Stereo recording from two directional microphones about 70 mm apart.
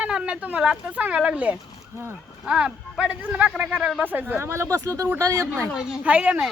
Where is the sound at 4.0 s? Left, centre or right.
Right.